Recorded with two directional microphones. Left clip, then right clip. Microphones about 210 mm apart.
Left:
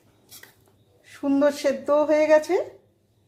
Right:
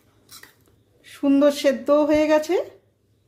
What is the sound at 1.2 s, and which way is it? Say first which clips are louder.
Speech: right 3 dB; 20° right (ahead or behind).